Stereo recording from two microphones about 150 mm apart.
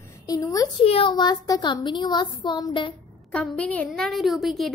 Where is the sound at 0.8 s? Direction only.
35° left (ahead or behind).